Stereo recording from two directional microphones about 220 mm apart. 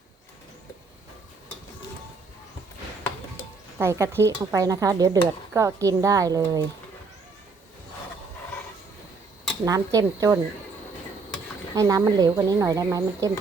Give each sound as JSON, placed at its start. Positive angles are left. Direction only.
{"t": 3.8, "sound": "speech", "side_deg": -10}
{"t": 9.6, "sound": "speech", "side_deg": -15}
{"t": 11.7, "sound": "speech", "side_deg": -15}